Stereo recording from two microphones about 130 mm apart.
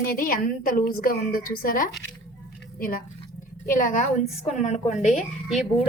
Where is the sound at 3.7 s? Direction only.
90° left; by 5.6 s 70° left (ahead or behind).